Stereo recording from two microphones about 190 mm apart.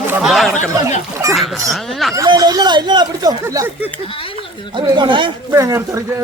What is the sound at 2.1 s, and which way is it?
Speech, 20° right (ahead or behind).